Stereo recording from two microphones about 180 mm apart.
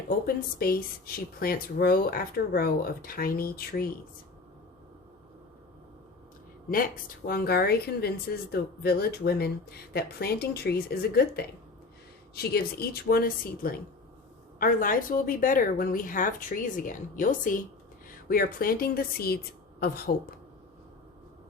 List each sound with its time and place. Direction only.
0.6 s speech: 55° left (ahead or behind)
6.7 s a woman's voice: 50° left (ahead or behind)